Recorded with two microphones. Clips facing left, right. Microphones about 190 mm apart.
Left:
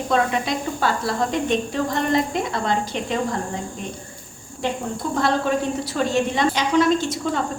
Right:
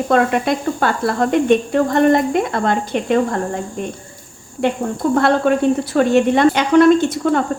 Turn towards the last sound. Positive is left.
turn(degrees=-55)  # may be behind; listen again after turning